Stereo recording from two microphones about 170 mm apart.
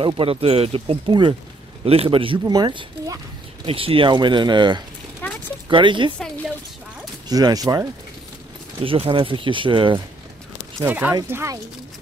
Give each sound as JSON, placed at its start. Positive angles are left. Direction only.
{"t": 0.0, "sound": "speech", "side_deg": -35}
{"t": 5.2, "sound": "a sound", "side_deg": 10}
{"t": 5.7, "sound": "speech", "side_deg": -30}
{"t": 6.1, "sound": "a sound", "side_deg": 5}
{"t": 7.2, "sound": "speech", "side_deg": -20}
{"t": 8.8, "sound": "speech", "side_deg": -30}
{"t": 10.8, "sound": "speech", "side_deg": -10}